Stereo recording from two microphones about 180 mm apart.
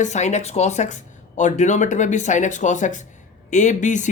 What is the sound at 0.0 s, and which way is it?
Speech, 40° left (ahead or behind).